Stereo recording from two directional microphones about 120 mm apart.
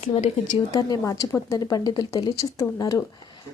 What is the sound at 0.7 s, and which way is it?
A woman's voice, 35° left (ahead or behind).